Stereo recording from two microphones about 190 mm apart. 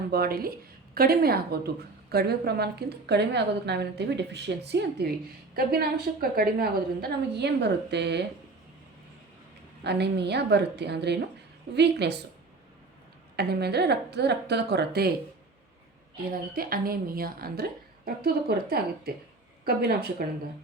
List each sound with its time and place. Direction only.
0.1 s a woman's voice: 55° right (ahead or behind)
9.8 s a woman's voice: 60° right (ahead or behind)
13.3 s a woman's voice: 55° right (ahead or behind)
16.3 s a woman's voice: 50° right (ahead or behind)